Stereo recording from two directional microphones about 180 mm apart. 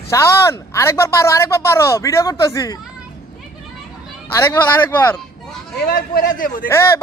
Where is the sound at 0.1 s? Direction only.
15° left (ahead or behind).